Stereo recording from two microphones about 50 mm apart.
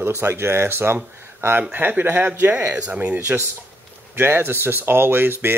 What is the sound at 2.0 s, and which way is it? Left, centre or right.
Speech, right.